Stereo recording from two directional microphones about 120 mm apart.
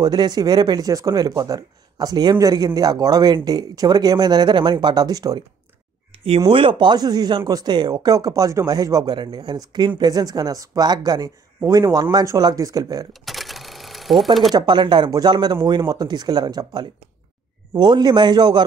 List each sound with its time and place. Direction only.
0.0 s speech: 35° right (ahead or behind)
6.1 s a sound: 55° right (ahead or behind)
6.5 s speech: 45° right (ahead or behind)
13.2 s sewing machine: centre (ahead or behind)
14.5 s speech: 40° right (ahead or behind)